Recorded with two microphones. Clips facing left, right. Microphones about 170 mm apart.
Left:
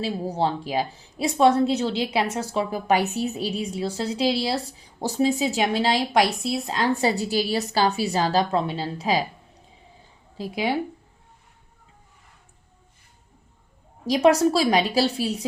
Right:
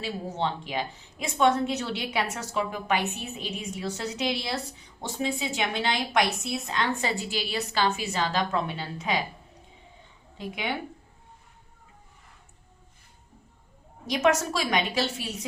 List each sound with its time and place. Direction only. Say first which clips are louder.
0.0 s a woman's voice: left 5 dB; 35° left (ahead or behind)
10.3 s speech: left 6 dB; 35° left (ahead or behind)
14.1 s a woman's voice: left 7 dB; 35° left (ahead or behind)